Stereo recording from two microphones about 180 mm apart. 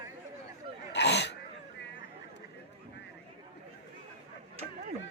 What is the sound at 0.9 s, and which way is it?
Sneeze, 70° left (ahead or behind).